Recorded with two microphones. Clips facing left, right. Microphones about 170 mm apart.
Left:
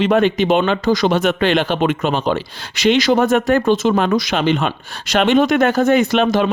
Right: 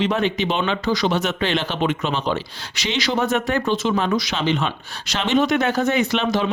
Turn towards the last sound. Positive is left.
turn(degrees=50)  # may be behind; listen again after turning